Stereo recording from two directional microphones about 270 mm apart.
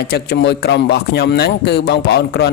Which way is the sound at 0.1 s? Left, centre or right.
Left.